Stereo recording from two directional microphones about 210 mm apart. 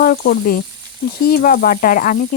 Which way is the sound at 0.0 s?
40° left (ahead or behind).